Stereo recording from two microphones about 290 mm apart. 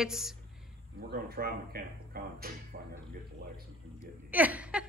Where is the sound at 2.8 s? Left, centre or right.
Right.